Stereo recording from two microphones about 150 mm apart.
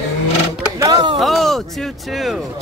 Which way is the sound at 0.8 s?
30° right (ahead or behind).